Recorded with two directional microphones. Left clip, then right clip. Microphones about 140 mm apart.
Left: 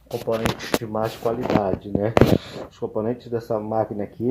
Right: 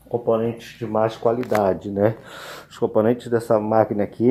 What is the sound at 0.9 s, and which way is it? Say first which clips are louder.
Speech: right 10 dB; 10° right (ahead or behind).